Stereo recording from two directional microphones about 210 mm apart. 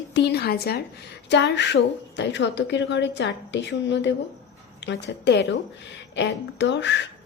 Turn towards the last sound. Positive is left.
turn(degrees=55)  # may be behind; listen again after turning